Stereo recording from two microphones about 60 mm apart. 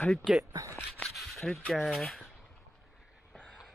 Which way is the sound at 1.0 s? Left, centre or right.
Centre.